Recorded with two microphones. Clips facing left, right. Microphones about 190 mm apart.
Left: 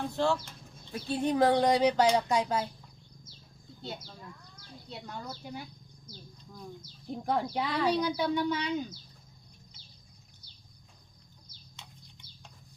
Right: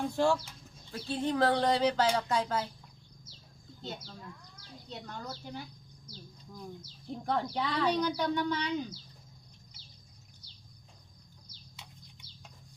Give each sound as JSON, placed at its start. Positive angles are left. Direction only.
{"t": 0.2, "sound": "speech", "side_deg": -10}
{"t": 0.9, "sound": "speech", "side_deg": 15}
{"t": 3.8, "sound": "speech", "side_deg": 10}
{"t": 7.3, "sound": "speech", "side_deg": 10}
{"t": 11.8, "sound": "bird", "side_deg": -10}